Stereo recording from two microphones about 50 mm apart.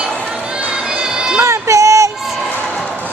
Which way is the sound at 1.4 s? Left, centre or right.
Right.